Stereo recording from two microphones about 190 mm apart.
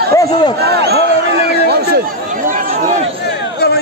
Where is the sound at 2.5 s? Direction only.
45° right (ahead or behind).